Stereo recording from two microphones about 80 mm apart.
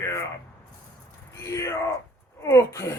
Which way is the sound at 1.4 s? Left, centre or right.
Left.